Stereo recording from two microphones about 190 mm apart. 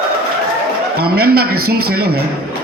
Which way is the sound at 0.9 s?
55° right (ahead or behind).